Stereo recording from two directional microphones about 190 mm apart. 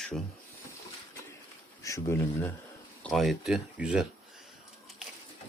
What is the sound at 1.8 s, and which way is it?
Speech, 15° left (ahead or behind).